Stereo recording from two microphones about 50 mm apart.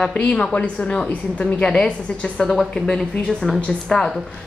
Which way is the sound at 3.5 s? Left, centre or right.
Left.